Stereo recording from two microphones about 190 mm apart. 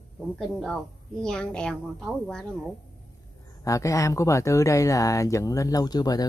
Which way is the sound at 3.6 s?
15° left (ahead or behind).